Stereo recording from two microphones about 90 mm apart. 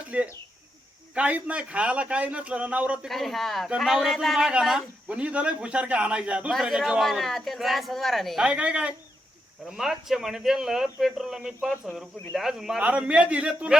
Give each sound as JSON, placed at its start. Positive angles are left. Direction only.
{"t": 0.1, "sound": "speech", "side_deg": -15}
{"t": 3.1, "sound": "speech", "side_deg": 0}
{"t": 8.4, "sound": "speech", "side_deg": -15}